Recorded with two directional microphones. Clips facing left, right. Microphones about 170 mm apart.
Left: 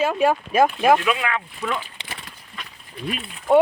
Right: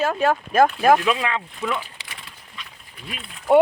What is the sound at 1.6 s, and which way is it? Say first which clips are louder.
Speech: right 1 dB; 5° right (ahead or behind).